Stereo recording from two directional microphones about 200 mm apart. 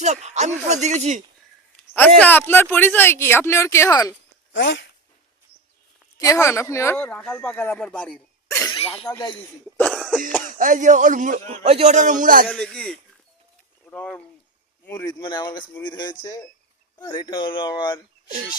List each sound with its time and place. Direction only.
0.0 s a man's voice: 35° right (ahead or behind)
1.7 s speech: 5° left (ahead or behind)
4.5 s speech: 60° left (ahead or behind)
6.1 s speech: 15° left (ahead or behind)
8.8 s speech: 30° left (ahead or behind)
9.7 s cough: 5° left (ahead or behind)
10.4 s a man's voice: 40° right (ahead or behind)
12.5 s a man's voice: 5° left (ahead or behind)
15.2 s speech: 20° left (ahead or behind)